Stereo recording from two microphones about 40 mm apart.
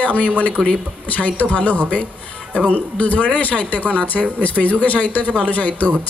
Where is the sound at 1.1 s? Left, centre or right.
Left.